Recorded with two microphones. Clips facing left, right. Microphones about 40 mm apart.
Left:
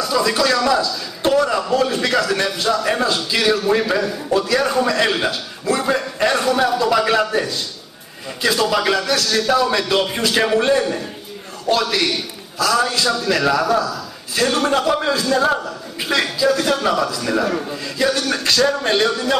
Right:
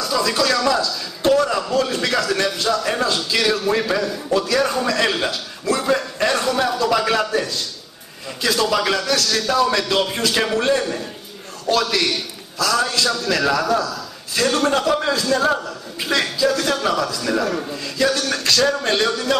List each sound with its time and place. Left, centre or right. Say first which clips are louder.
0.0 s a man's voice: left 2 dB; centre